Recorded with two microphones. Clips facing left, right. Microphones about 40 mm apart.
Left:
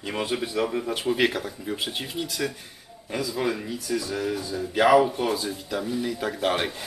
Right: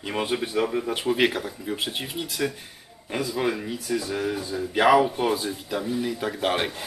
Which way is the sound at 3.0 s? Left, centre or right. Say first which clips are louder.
Right 1 dB; right.